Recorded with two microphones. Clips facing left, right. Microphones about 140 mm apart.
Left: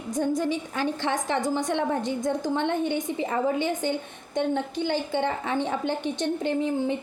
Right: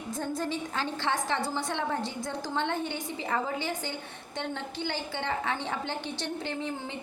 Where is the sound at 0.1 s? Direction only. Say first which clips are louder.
Left 7 dB; 15° left (ahead or behind).